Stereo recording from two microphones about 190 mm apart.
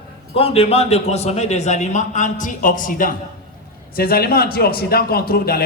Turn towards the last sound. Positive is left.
turn(degrees=55)  # may be behind; listen again after turning